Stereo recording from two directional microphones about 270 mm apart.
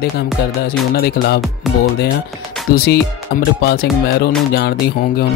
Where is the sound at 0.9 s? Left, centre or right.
Left.